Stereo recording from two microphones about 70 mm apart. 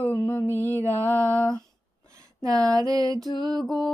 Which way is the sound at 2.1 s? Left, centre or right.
Right.